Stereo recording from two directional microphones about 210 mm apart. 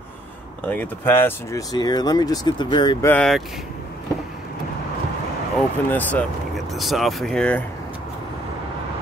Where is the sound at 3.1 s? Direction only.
5° left (ahead or behind).